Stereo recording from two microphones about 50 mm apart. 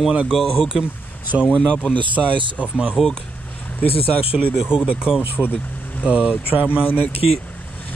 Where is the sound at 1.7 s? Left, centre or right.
Left.